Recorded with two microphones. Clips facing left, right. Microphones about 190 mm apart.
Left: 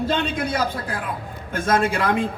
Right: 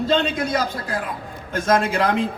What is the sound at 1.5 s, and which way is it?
Speech, 50° left (ahead or behind).